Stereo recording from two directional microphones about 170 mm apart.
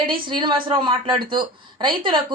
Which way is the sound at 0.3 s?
30° right (ahead or behind).